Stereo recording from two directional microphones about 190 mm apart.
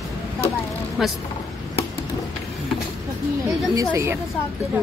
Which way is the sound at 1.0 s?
Centre (ahead or behind).